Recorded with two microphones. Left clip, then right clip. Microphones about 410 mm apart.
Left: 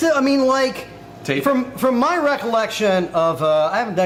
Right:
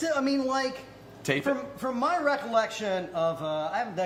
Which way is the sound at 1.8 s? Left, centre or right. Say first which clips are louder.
Left 9 dB; left.